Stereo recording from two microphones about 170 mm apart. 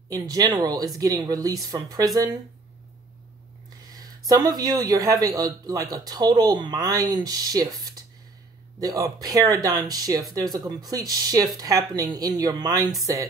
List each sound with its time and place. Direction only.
0.1 s a man's voice: 20° right (ahead or behind)
3.9 s a man's voice: 20° right (ahead or behind)